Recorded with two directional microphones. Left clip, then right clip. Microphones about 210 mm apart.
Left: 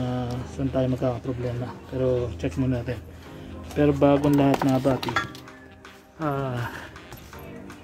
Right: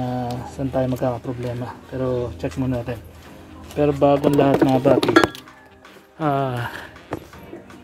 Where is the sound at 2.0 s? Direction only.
25° right (ahead or behind).